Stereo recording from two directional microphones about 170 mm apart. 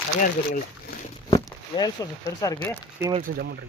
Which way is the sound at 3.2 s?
70° right (ahead or behind).